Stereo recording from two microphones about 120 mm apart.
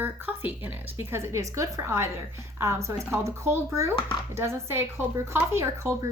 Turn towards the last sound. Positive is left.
turn(degrees=-20)  # may be behind; listen again after turning